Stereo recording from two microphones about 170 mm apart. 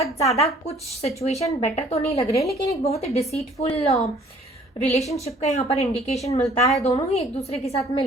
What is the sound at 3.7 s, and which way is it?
A woman's voice, 40° left (ahead or behind).